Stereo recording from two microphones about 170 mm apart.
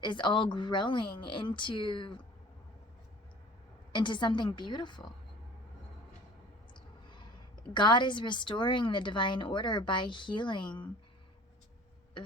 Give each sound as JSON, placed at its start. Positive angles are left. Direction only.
{"t": 0.0, "sound": "speech", "side_deg": 25}
{"t": 3.9, "sound": "speech", "side_deg": 30}
{"t": 6.7, "sound": "a woman's voice", "side_deg": 25}